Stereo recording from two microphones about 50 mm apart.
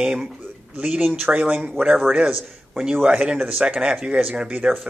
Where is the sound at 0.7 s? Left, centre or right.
Right.